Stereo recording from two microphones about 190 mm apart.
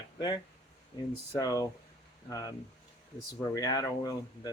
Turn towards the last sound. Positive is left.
turn(degrees=20)  # may be behind; listen again after turning